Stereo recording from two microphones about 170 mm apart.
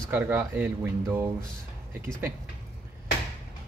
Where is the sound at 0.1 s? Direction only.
10° right (ahead or behind).